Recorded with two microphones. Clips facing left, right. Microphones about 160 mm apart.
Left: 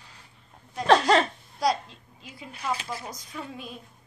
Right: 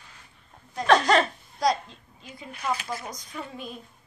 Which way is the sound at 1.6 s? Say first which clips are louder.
Right 1 dB; 5° left (ahead or behind).